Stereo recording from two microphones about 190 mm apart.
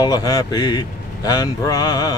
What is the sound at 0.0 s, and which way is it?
Speech, 20° left (ahead or behind).